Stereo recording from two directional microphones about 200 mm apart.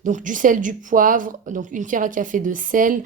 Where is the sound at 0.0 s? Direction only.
40° right (ahead or behind).